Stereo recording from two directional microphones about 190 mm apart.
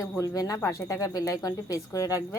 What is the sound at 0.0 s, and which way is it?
Speech, 20° left (ahead or behind).